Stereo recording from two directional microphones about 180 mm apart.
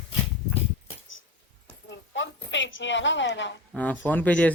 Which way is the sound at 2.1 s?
90° left.